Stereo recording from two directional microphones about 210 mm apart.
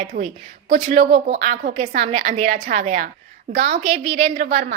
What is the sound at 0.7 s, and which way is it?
A woman's voice, 30° right (ahead or behind).